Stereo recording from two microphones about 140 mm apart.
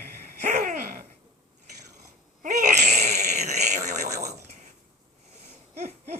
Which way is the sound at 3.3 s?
55° right (ahead or behind).